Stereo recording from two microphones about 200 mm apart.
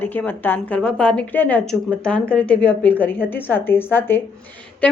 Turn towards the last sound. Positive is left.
turn(degrees=5)  # may be behind; listen again after turning